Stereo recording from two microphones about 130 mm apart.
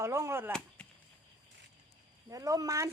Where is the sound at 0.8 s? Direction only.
10° left (ahead or behind).